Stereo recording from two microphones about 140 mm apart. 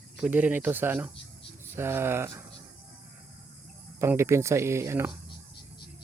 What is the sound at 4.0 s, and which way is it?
Speech, 20° right (ahead or behind).